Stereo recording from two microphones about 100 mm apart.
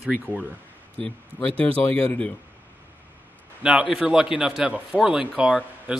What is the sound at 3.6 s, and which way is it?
A man's voice, 10° right (ahead or behind).